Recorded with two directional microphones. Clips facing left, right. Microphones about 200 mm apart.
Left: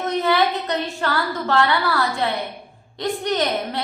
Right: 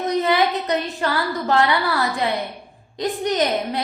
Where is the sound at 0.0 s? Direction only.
20° right (ahead or behind).